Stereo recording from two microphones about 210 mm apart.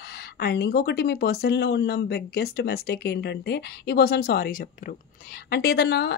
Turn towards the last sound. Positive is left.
turn(degrees=50)  # may be behind; listen again after turning